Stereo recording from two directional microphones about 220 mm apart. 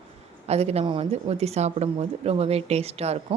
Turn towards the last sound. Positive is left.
turn(degrees=-30)  # may be behind; listen again after turning